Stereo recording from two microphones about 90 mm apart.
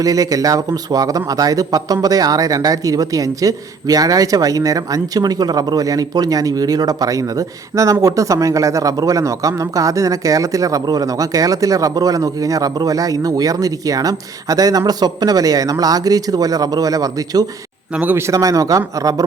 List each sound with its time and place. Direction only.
0.0 s speech: 40° right (ahead or behind)
17.9 s speech: 20° right (ahead or behind)
18.3 s speech: 35° right (ahead or behind)